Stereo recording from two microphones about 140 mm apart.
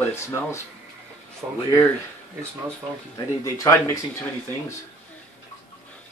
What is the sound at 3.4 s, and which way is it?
Speech, 20° left (ahead or behind).